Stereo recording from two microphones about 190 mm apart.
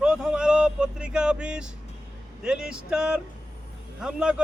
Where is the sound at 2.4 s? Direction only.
5° right (ahead or behind).